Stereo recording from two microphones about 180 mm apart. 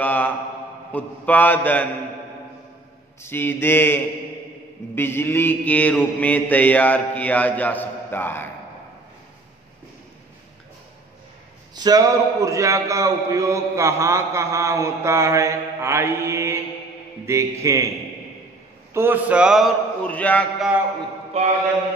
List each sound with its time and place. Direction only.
0.0 s mantra: 10° left (ahead or behind)
3.2 s mantra: 15° left (ahead or behind)
11.7 s a man's voice: 20° right (ahead or behind)
18.9 s a man's voice: 10° right (ahead or behind); by 20.4 s 10° left (ahead or behind)
21.4 s mantra: 35° right (ahead or behind)